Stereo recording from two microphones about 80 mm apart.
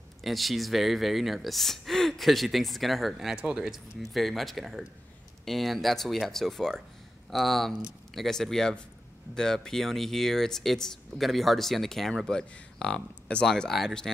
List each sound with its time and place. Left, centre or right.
0.2 s speech: centre